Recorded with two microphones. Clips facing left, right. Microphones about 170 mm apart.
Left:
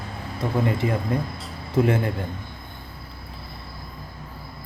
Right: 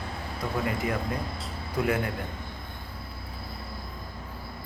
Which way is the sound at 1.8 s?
25° left (ahead or behind).